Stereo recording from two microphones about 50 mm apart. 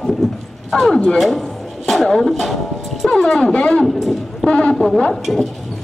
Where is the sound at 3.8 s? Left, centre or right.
Centre.